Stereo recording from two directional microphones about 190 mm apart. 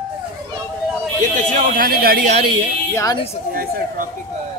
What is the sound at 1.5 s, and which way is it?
Speech, 50° right (ahead or behind).